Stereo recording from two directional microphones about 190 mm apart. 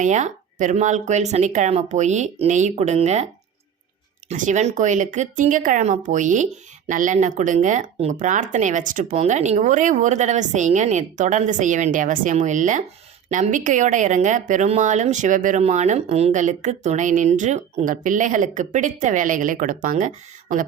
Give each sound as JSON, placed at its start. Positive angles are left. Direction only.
{"t": 0.0, "sound": "speech", "side_deg": -40}
{"t": 4.3, "sound": "speech", "side_deg": -40}